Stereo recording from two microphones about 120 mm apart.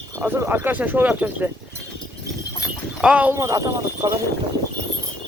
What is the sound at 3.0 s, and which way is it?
Speech, 10° right (ahead or behind).